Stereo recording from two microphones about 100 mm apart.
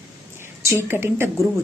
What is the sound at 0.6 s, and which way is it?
Speech, 25° right (ahead or behind).